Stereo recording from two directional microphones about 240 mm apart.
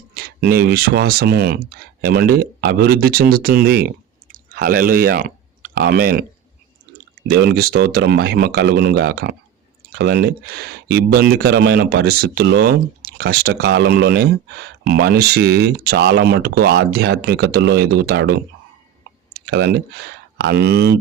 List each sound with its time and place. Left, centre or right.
0.1 s speech: right
7.3 s speech: right